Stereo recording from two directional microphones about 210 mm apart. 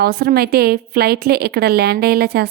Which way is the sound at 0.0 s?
45° right (ahead or behind).